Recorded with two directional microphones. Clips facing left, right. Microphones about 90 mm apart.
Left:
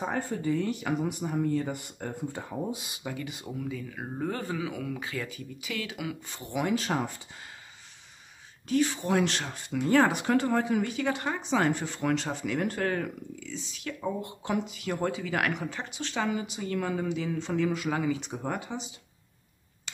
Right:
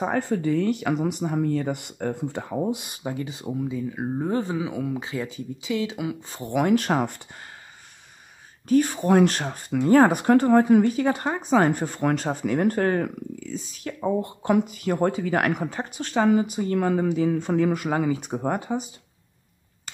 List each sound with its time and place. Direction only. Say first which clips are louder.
0.0 s speech: right 6 dB; 80° right
3.0 s speech: right 6 dB; 30° right (ahead or behind)
6.3 s speech: right 8 dB; 50° right (ahead or behind)
8.6 s speech: right 7 dB; 45° right (ahead or behind)